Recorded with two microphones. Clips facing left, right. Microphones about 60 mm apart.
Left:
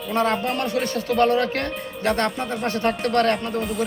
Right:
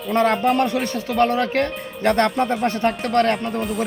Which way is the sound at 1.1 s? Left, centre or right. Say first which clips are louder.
Right 1 dB; centre.